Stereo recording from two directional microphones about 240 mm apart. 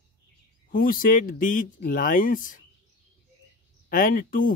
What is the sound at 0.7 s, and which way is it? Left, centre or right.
Speech, left.